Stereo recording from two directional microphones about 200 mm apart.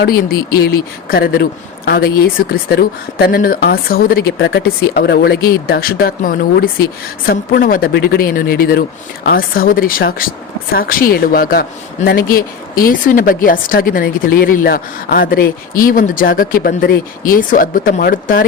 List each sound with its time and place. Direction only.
0.0 s speech: 50° left (ahead or behind)